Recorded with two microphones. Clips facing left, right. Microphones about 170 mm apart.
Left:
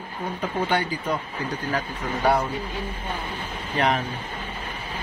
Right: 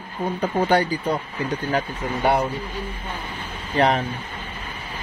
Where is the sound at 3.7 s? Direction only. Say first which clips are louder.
Right 4 dB; 35° right (ahead or behind).